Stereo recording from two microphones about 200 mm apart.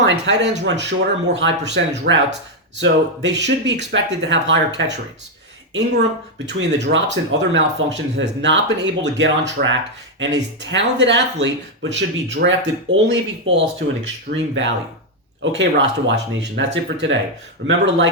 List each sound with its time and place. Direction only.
0.0 s speech: 60° right (ahead or behind)
9.6 s speech: 50° right (ahead or behind)